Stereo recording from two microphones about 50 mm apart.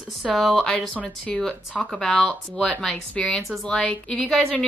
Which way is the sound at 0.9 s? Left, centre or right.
Left.